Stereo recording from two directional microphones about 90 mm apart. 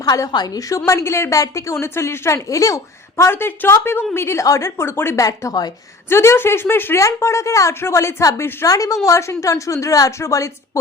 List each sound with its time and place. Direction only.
0.0 s a woman's voice: 40° left (ahead or behind)
0.9 s speech: 30° left (ahead or behind)
3.2 s a woman's voice: 25° left (ahead or behind)
5.2 s speech: 40° left (ahead or behind)
6.1 s speech: 30° left (ahead or behind)